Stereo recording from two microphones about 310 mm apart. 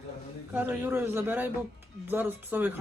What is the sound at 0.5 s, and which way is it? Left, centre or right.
Speech, centre.